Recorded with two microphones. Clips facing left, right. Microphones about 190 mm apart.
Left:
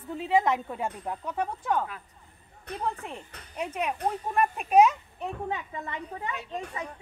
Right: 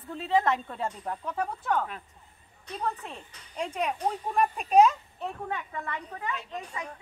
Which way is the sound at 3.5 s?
5° left (ahead or behind).